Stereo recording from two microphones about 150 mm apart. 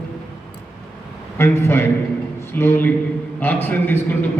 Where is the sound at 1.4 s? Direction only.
15° left (ahead or behind).